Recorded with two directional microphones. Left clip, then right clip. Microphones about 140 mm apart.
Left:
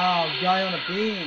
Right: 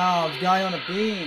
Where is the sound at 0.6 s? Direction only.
Centre (ahead or behind).